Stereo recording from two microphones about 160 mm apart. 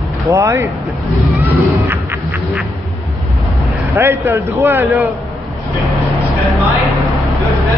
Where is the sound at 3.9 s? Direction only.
15° right (ahead or behind).